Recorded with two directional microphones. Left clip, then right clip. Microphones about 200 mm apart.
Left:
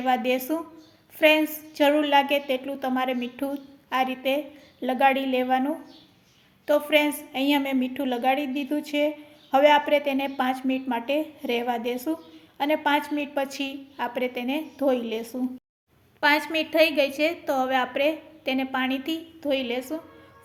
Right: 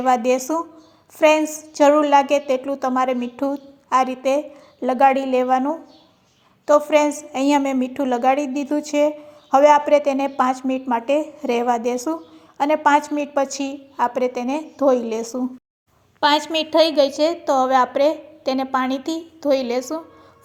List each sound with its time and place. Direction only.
0.0 s a woman's voice: 20° right (ahead or behind)
15.3 s a woman's voice: 30° right (ahead or behind)
16.7 s a woman's voice: centre (ahead or behind)
17.2 s a woman's voice: 20° right (ahead or behind)
19.5 s a woman's voice: 10° right (ahead or behind)